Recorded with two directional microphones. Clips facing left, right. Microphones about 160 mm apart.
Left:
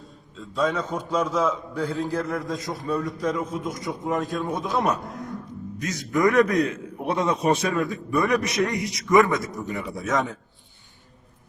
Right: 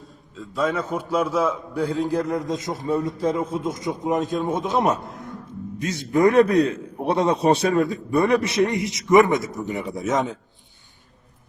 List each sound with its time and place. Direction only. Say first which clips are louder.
0.3 s a man's voice: right 1 dB; 5° right (ahead or behind); by 10.3 s 20° right (ahead or behind)